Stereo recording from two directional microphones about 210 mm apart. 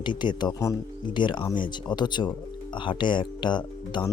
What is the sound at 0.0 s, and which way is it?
Speech, 20° left (ahead or behind).